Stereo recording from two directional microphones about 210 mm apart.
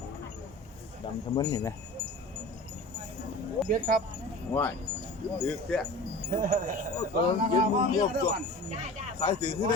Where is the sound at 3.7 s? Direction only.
40° right (ahead or behind).